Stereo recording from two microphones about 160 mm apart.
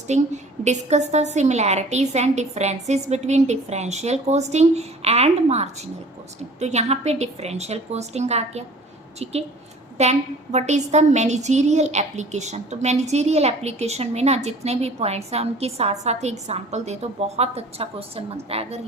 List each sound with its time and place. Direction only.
0.1 s a woman's voice: 45° right (ahead or behind)